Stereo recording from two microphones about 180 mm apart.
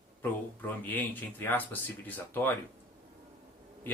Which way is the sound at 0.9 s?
10° left (ahead or behind).